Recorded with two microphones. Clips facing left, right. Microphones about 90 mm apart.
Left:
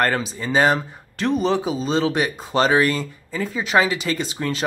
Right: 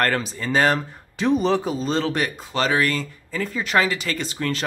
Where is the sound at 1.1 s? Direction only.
5° right (ahead or behind).